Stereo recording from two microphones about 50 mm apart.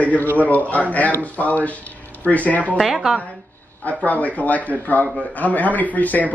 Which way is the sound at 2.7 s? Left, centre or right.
Centre.